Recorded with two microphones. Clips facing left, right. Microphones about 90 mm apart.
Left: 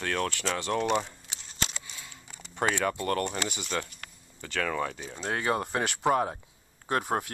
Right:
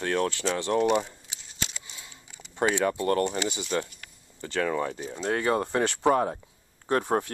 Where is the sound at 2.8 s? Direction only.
30° right (ahead or behind).